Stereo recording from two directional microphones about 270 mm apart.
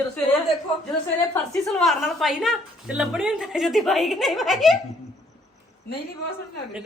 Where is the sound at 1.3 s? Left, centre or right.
Centre.